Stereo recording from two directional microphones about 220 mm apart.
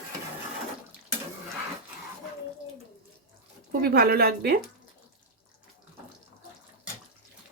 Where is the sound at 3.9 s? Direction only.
45° right (ahead or behind).